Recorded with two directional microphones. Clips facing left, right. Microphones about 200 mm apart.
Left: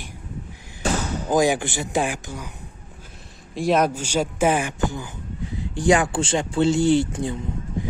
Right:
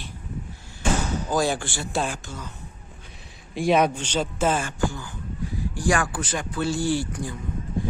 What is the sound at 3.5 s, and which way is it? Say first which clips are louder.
Speech: even; centre (ahead or behind).